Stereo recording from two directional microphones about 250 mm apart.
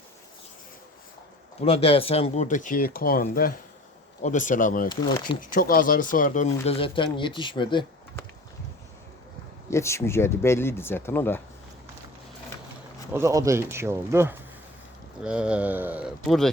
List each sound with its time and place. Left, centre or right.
1.6 s speech: left
4.9 s speech: centre
5.4 s speech: left; by 8.2 s centre
9.6 s speech: centre
13.1 s speech: centre